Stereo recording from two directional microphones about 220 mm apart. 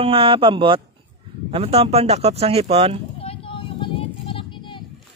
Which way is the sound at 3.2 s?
25° left (ahead or behind).